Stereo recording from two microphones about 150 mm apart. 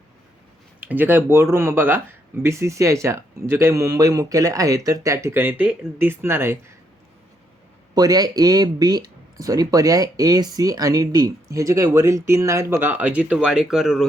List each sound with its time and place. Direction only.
0.8 s speech: 10° right (ahead or behind)
7.9 s speech: 25° right (ahead or behind); by 14.1 s centre (ahead or behind)